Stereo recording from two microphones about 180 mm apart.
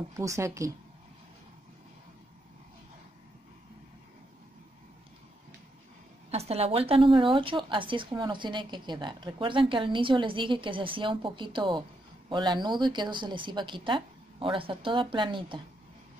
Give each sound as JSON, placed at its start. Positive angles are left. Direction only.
{"t": 0.2, "sound": "a woman's voice", "side_deg": -15}
{"t": 6.3, "sound": "a woman's voice", "side_deg": -35}